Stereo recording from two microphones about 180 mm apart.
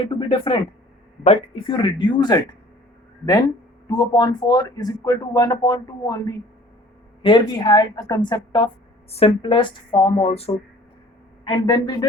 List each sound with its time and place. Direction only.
0.0 s a woman's voice: 30° left (ahead or behind)
3.8 s a woman's voice: 20° left (ahead or behind)